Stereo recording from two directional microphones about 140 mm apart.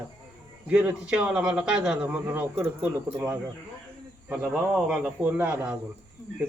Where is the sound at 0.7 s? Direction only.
10° right (ahead or behind).